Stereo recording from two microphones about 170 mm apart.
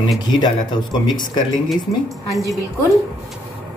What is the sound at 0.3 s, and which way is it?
Speech, 25° left (ahead or behind).